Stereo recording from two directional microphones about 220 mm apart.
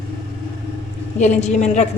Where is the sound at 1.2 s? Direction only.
30° left (ahead or behind).